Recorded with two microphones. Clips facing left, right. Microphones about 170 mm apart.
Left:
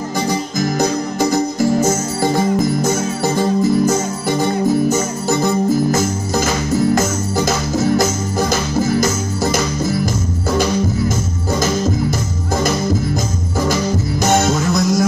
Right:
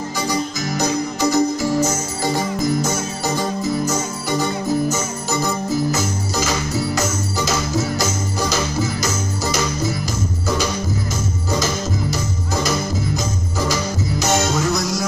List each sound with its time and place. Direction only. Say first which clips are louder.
1.3 s music: left 1 dB; 50° left (ahead or behind)
14.2 s music: left 4 dB; 50° left (ahead or behind)